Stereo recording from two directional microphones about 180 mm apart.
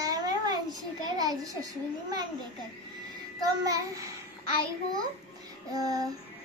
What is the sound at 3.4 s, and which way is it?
Music, 20° right (ahead or behind).